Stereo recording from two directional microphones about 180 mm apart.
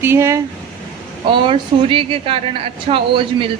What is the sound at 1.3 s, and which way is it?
A woman's voice, 25° right (ahead or behind).